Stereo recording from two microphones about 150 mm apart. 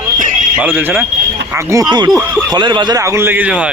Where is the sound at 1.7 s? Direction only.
25° right (ahead or behind).